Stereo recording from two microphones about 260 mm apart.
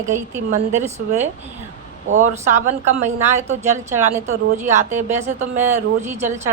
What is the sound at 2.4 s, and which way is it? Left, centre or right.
Speech, right.